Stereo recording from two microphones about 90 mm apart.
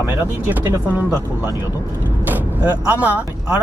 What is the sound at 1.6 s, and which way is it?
Speech, 20° right (ahead or behind).